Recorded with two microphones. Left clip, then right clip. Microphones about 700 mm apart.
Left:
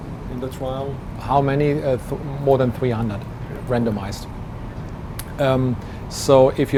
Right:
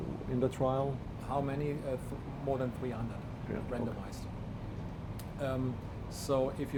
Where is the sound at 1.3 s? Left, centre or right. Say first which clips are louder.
Left 17 dB; left.